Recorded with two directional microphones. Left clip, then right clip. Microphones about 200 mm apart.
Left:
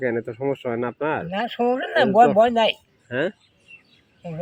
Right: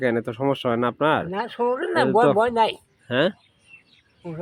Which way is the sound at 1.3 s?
20° right (ahead or behind).